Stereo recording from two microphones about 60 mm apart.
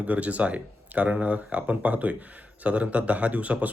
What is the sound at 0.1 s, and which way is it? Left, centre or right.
A man's voice, right.